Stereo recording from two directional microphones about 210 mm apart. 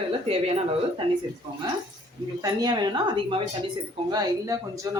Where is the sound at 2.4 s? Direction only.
20° right (ahead or behind).